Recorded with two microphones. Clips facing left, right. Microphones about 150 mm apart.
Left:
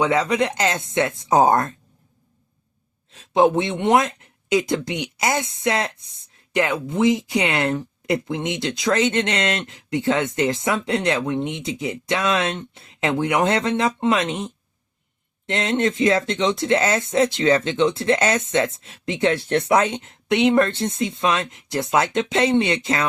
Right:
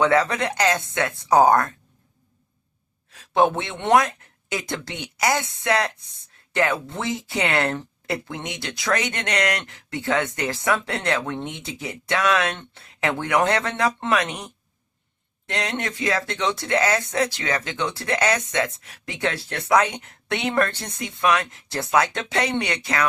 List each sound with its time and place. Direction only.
0.0 s speech: 15° left (ahead or behind)
3.1 s speech: 20° left (ahead or behind)